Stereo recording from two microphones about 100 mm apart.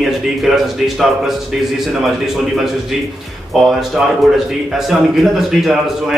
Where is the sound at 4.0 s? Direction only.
5° right (ahead or behind).